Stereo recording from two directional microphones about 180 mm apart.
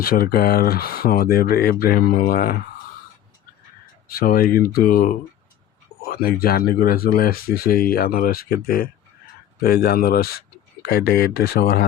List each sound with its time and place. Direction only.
0.0 s speech: 55° left (ahead or behind)
4.1 s speech: 55° left (ahead or behind)